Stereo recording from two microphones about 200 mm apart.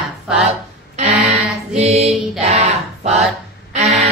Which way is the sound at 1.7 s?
35° right (ahead or behind).